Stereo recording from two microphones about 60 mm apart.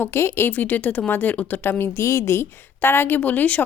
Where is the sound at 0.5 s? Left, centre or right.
Left.